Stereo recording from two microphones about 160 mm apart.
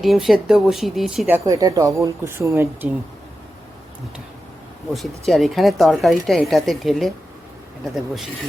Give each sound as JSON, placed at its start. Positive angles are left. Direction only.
{"t": 0.0, "sound": "speech", "side_deg": 0}
{"t": 1.5, "sound": "speech", "side_deg": -25}
{"t": 4.9, "sound": "speech", "side_deg": 0}
{"t": 8.1, "sound": "speech", "side_deg": 0}